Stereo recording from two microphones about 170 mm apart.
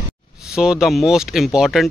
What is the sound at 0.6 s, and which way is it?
Speech, 5° right (ahead or behind).